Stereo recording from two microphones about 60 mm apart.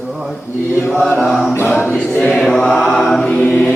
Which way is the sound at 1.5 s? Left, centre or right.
Left.